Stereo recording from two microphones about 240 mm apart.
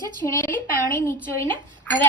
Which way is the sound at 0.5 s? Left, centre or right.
Centre.